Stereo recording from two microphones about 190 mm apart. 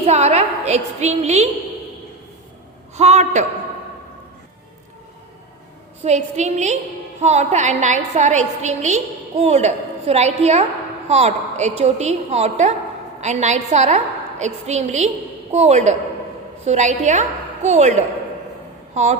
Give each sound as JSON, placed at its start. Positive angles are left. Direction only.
{"t": 0.0, "sound": "a woman's voice", "side_deg": -35}
{"t": 2.9, "sound": "a woman's voice", "side_deg": -35}
{"t": 6.0, "sound": "a woman's voice", "side_deg": -35}